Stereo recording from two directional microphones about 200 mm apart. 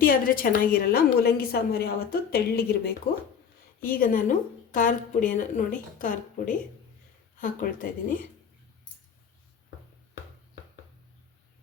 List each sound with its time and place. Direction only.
0.0 s a woman's voice: 45° left (ahead or behind)